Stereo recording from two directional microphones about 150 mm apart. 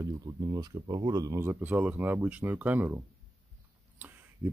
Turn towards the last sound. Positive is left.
turn(degrees=-15)  # may be behind; listen again after turning